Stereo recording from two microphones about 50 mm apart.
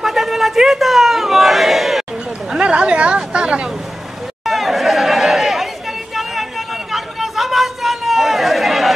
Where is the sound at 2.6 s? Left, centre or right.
Right.